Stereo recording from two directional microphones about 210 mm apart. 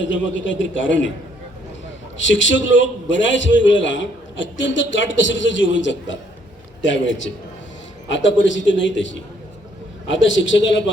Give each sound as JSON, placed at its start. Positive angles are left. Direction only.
{"t": 0.0, "sound": "a man's voice", "side_deg": 60}
{"t": 2.1, "sound": "a man's voice", "side_deg": 60}